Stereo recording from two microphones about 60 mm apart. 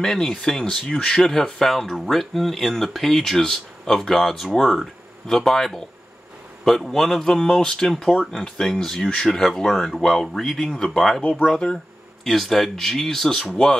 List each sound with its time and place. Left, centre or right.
0.0 s a man's voice: centre
11.2 s speech: left
11.5 s a man's voice: centre